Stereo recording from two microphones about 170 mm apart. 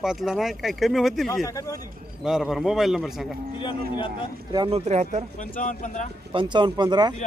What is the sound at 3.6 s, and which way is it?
Speech, 30° left (ahead or behind).